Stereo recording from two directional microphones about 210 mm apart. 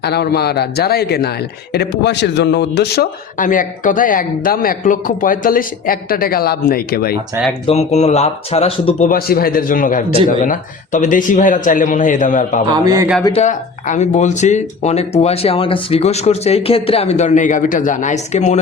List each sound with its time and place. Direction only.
0.0 s speech: 50° left (ahead or behind)
7.7 s speech: 30° left (ahead or behind)
9.0 s speech: 45° left (ahead or behind)
12.7 s speech: 15° right (ahead or behind)
13.2 s speech: 30° left (ahead or behind)